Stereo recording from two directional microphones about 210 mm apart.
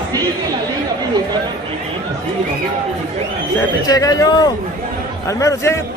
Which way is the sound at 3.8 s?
15° left (ahead or behind).